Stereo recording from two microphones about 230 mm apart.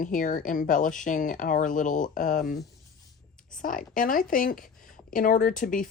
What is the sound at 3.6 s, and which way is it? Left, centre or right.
Speech, left.